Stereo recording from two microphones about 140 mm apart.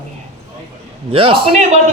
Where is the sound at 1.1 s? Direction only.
40° right (ahead or behind).